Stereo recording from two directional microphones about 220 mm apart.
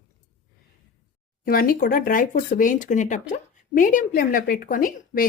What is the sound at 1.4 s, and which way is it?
A woman's voice, 40° left (ahead or behind).